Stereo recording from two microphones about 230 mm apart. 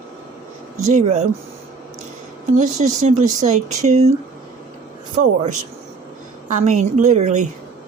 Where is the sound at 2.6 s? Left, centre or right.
Right.